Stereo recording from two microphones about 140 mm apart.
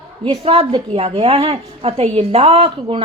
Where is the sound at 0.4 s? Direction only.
40° right (ahead or behind).